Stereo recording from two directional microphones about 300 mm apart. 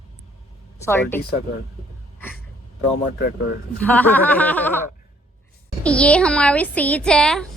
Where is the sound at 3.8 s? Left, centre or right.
Centre.